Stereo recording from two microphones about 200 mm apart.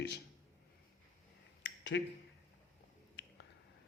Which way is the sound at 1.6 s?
65° left (ahead or behind).